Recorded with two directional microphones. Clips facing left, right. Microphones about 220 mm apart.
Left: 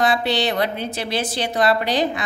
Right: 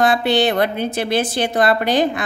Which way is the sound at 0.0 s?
50° right (ahead or behind).